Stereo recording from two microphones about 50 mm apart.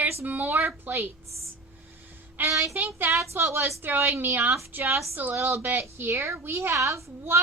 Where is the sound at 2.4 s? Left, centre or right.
Right.